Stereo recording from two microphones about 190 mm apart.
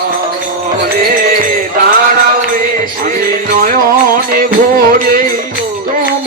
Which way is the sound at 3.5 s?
50° right (ahead or behind).